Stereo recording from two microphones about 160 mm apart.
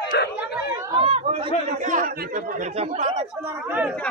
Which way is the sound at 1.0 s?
35° right (ahead or behind).